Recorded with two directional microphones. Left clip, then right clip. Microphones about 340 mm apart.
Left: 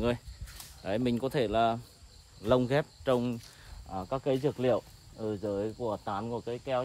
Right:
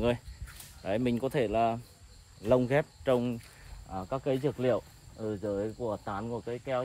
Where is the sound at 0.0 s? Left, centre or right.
Centre.